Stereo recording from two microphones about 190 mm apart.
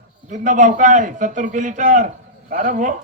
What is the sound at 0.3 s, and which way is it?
A man's voice, 40° right (ahead or behind).